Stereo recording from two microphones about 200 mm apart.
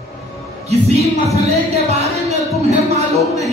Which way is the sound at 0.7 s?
30° right (ahead or behind).